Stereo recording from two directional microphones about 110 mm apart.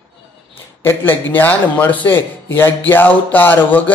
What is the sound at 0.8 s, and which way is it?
A man's voice, 20° left (ahead or behind).